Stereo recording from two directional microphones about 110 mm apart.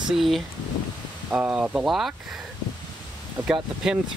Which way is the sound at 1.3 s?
10° right (ahead or behind).